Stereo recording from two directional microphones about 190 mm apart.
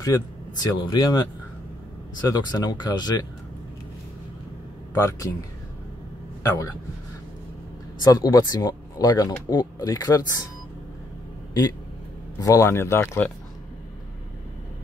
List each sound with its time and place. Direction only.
0.0 s speech: 20° left (ahead or behind)
2.2 s speech: 20° left (ahead or behind)
4.9 s speech: 15° left (ahead or behind)
8.0 s speech: 20° left (ahead or behind)
12.4 s speech: 15° left (ahead or behind)